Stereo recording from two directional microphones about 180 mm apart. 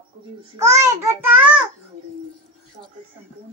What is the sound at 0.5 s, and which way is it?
A child's voice, 15° right (ahead or behind).